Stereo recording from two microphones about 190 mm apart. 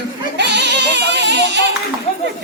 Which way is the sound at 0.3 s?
65° right (ahead or behind).